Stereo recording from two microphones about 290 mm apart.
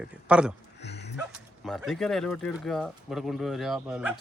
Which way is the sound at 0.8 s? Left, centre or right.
Left.